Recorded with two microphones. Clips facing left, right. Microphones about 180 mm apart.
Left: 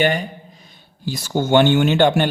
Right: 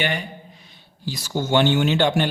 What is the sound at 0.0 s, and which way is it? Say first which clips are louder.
A man's voice: left 7 dB; 40° left (ahead or behind).